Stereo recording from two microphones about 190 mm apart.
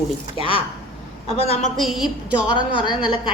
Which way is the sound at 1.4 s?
30° left (ahead or behind).